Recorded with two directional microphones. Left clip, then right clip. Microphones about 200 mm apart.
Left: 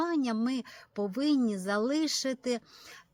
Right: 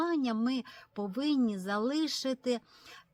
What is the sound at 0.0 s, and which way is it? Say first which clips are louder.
Speech: left 1 dB; 30° left (ahead or behind).